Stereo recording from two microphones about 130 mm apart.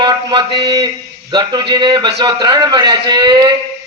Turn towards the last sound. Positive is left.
turn(degrees=-35)  # may be behind; listen again after turning